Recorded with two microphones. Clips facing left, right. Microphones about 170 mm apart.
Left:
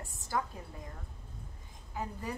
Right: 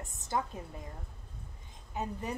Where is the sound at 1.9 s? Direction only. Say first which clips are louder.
Right 2 dB; 20° right (ahead or behind).